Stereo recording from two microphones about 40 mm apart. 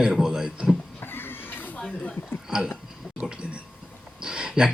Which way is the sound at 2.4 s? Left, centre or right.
Centre.